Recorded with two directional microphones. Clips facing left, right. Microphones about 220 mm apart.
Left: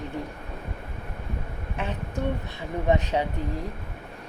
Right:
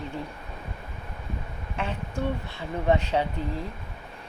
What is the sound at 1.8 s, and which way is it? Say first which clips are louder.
A woman's voice: even; 20° left (ahead or behind).